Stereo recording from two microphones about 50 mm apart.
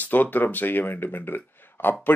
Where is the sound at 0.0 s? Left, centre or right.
Left.